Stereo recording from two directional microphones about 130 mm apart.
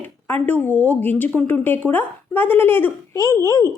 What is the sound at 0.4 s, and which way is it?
A woman's voice, 10° left (ahead or behind).